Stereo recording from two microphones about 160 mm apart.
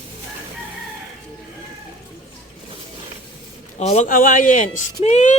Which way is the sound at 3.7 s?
45° left (ahead or behind).